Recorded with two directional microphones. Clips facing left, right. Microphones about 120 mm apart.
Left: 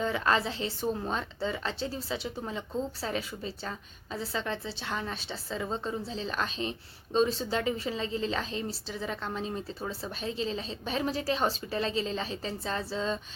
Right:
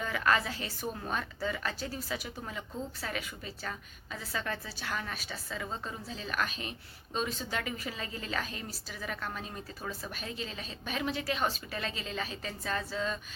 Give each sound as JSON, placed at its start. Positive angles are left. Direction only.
{"t": 0.0, "sound": "a woman's voice", "side_deg": 25}